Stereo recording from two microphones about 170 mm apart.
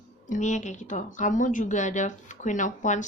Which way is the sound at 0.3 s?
45° left (ahead or behind).